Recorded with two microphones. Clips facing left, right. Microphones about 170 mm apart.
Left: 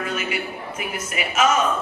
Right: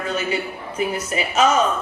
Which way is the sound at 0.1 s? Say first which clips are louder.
Right 4 dB; 30° right (ahead or behind).